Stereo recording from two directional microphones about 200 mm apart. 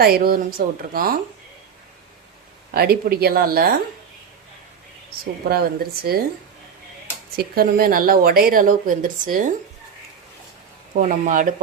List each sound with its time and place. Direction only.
0.0 s a woman's voice: 50° right (ahead or behind)
2.7 s a woman's voice: 50° right (ahead or behind)
5.2 s a woman's voice: 50° right (ahead or behind)
7.3 s a woman's voice: 50° right (ahead or behind)
10.9 s speech: 40° right (ahead or behind)